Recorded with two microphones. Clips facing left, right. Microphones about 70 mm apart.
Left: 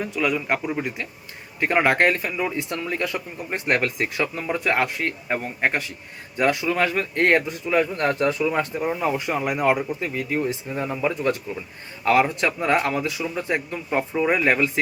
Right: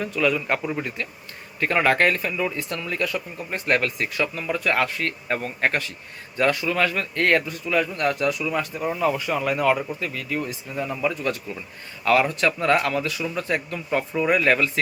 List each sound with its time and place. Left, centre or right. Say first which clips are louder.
0.0 s speech: right 1 dB; centre; by 8.8 s left
8.8 s speech: even; centre